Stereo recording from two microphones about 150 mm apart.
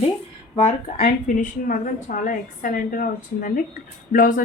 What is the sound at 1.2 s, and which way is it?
A woman's voice, 60° left (ahead or behind).